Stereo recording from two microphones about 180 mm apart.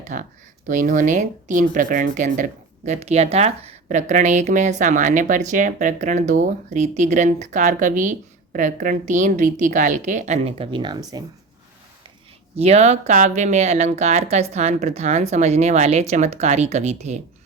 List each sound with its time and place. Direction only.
0.0 s speech: 45° right (ahead or behind); by 11.2 s 25° right (ahead or behind)
12.5 s speech: 35° right (ahead or behind)